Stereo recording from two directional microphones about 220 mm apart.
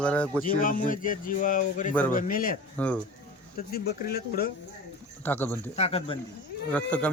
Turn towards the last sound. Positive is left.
turn(degrees=5)  # may be behind; listen again after turning